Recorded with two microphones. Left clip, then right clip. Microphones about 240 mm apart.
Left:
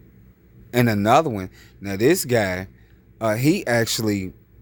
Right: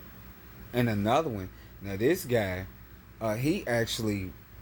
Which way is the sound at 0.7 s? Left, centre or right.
Left.